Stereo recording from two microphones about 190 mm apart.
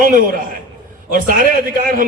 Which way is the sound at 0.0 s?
45° right (ahead or behind).